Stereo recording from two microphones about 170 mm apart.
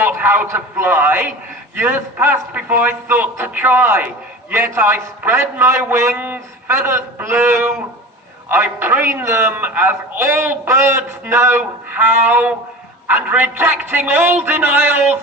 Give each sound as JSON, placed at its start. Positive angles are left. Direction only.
{"t": 0.0, "sound": "a man's voice", "side_deg": -10}